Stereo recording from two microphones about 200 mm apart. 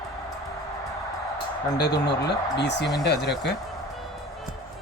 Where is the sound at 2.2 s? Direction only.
60° left (ahead or behind).